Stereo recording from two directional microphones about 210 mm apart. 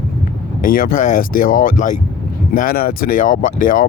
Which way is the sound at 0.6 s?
40° left (ahead or behind).